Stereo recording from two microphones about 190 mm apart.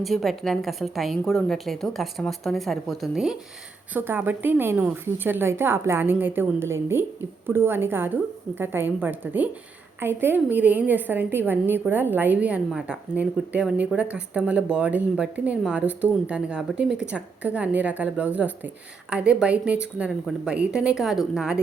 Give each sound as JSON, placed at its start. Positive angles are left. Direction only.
{"t": 0.0, "sound": "a woman's voice", "side_deg": 0}